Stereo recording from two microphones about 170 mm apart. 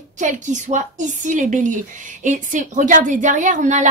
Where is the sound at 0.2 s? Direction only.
45° right (ahead or behind).